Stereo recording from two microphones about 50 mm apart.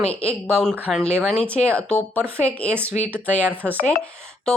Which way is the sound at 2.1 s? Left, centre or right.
Right.